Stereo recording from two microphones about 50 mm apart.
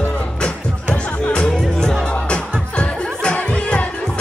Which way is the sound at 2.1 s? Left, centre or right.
Left.